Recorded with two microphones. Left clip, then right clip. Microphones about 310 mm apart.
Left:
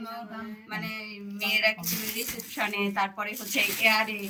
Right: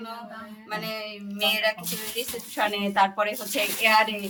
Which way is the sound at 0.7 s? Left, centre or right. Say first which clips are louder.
Right 4 dB; right.